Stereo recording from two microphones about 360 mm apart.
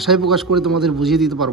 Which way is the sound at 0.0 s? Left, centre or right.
Centre.